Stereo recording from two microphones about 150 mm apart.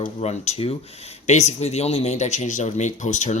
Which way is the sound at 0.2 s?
45° left (ahead or behind).